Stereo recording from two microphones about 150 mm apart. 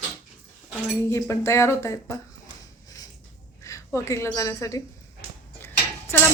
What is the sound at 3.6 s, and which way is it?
A woman's voice, 20° left (ahead or behind).